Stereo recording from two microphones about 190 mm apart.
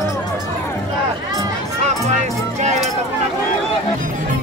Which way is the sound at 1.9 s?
40° right (ahead or behind).